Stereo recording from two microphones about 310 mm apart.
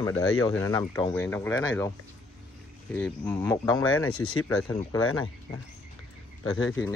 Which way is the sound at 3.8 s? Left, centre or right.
Left.